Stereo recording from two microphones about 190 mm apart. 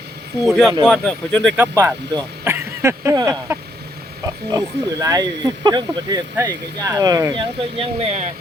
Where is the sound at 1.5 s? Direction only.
10° right (ahead or behind).